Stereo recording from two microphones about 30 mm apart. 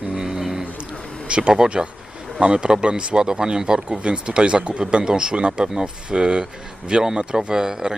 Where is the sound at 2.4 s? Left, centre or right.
Right.